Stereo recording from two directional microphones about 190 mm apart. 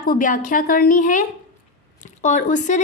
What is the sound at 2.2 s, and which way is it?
Speech, 40° left (ahead or behind).